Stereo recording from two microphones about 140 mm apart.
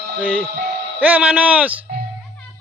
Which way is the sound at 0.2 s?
5° left (ahead or behind).